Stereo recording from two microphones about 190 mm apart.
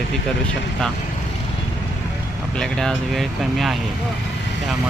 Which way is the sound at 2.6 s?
5° left (ahead or behind).